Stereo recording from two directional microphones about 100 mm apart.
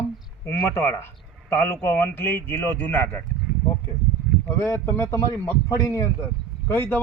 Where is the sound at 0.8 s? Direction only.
25° left (ahead or behind).